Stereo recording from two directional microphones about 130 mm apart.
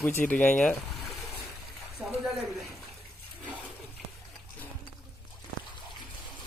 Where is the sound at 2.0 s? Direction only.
5° right (ahead or behind).